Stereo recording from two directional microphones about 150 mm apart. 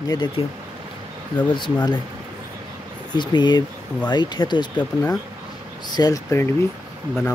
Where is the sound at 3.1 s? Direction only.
30° left (ahead or behind).